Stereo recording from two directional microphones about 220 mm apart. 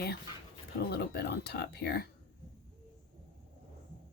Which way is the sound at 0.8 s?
50° left (ahead or behind).